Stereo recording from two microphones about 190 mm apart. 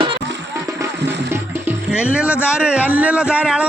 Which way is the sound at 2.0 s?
5° right (ahead or behind).